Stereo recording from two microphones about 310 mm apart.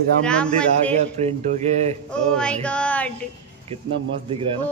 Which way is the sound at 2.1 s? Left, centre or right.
Centre.